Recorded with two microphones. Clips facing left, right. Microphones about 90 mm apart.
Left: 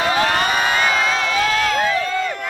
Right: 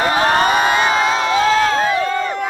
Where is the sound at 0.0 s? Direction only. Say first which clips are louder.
Right 3 dB; 35° right (ahead or behind).